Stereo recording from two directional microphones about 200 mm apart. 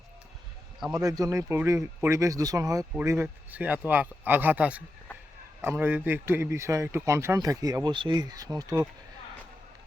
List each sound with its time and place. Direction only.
0.9 s speech: 15° right (ahead or behind)